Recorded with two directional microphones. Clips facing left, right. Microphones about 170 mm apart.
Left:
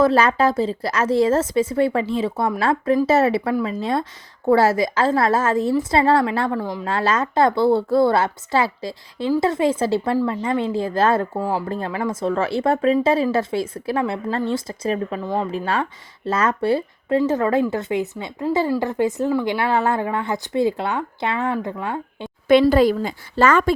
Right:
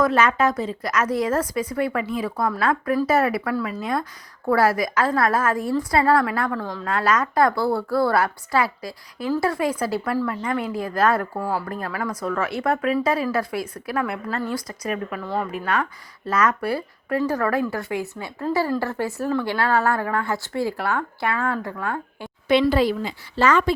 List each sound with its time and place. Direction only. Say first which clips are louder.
0.0 s a woman's voice: left 3 dB; 30° left (ahead or behind); by 6.8 s 15° left (ahead or behind)
6.8 s speech: right 1 dB; 25° left (ahead or behind)
22.7 s speech: left 4 dB; 45° left (ahead or behind)